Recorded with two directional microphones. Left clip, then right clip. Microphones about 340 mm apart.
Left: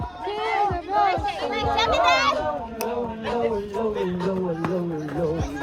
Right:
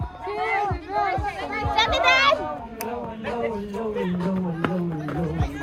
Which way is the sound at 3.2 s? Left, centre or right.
Left.